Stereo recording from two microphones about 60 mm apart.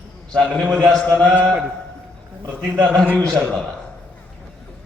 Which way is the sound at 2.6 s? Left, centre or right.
Centre.